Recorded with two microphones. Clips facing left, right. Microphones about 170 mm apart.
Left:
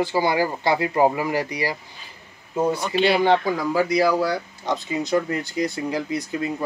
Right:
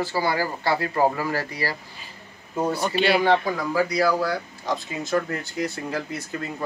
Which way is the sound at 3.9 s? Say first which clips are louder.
Left 3 dB; 20° left (ahead or behind).